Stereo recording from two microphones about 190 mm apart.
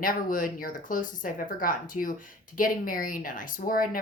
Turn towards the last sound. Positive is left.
turn(degrees=45)  # may be behind; listen again after turning